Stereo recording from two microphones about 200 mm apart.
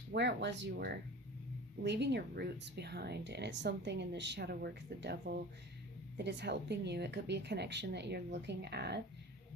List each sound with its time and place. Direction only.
0.1 s speech: 60° right (ahead or behind)